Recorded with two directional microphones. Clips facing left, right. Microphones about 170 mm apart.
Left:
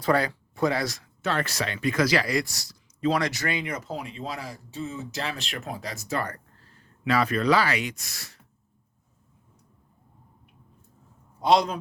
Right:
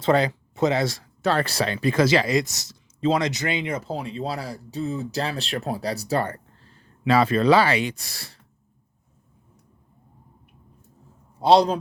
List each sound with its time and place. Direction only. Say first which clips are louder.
0.0 s speech: right 4 dB; 20° right (ahead or behind)
11.3 s a man's voice: right 5 dB; 30° right (ahead or behind)